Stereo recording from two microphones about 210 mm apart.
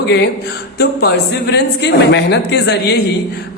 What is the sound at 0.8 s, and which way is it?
A man's voice, 50° left (ahead or behind).